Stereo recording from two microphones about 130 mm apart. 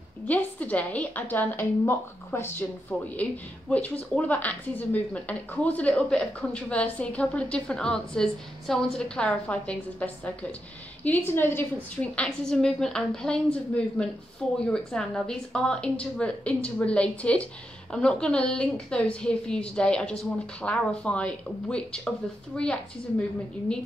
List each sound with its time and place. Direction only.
0.3 s a woman's voice: 10° left (ahead or behind)